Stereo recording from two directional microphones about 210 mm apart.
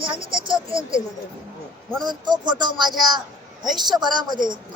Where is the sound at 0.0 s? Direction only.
25° right (ahead or behind).